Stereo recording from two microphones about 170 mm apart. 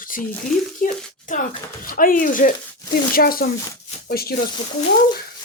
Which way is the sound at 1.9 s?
55° left (ahead or behind).